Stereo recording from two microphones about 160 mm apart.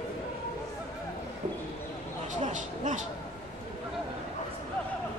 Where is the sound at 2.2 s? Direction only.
50° right (ahead or behind).